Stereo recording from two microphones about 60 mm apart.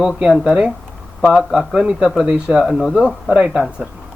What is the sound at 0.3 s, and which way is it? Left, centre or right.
Speech, centre.